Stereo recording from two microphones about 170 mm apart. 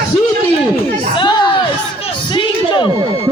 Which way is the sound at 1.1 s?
25° left (ahead or behind).